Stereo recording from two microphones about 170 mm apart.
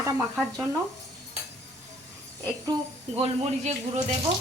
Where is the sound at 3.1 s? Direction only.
40° right (ahead or behind).